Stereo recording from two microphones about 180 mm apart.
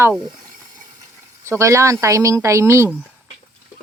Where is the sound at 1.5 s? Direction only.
15° right (ahead or behind).